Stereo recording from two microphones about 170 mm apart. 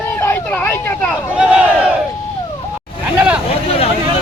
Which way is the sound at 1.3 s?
5° right (ahead or behind).